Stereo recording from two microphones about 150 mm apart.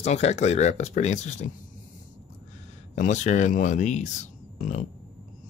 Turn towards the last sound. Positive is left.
turn(degrees=55)  # may be behind; listen again after turning